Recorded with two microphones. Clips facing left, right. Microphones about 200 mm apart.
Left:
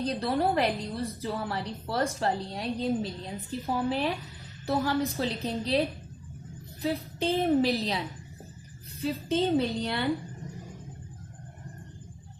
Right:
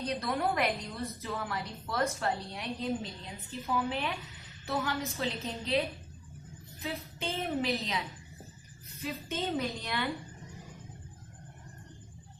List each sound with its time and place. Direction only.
0.0 s a woman's voice: 30° left (ahead or behind)
6.8 s a woman's voice: 35° left (ahead or behind)